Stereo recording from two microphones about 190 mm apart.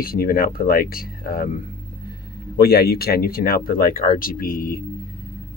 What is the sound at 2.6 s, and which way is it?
Speech, 55° left (ahead or behind).